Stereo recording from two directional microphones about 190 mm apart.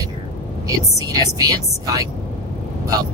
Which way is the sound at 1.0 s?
20° right (ahead or behind).